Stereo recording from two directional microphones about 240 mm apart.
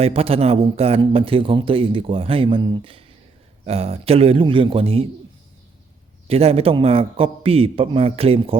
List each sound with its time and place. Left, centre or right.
0.0 s speech: right
6.2 s speech: right